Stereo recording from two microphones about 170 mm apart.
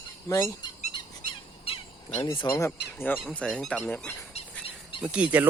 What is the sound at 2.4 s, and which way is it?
Speech, 15° left (ahead or behind).